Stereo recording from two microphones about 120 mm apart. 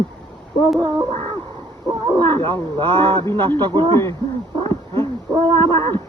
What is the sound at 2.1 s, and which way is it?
Speech, 40° right (ahead or behind).